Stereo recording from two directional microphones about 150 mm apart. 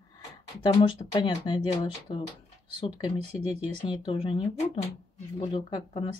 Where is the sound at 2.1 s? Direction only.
40° left (ahead or behind).